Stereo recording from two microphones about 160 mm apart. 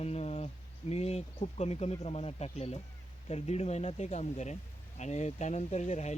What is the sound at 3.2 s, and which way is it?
Speech, 40° left (ahead or behind).